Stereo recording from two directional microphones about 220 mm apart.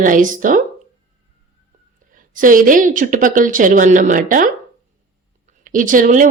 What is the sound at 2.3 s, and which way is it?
Speech, 35° right (ahead or behind).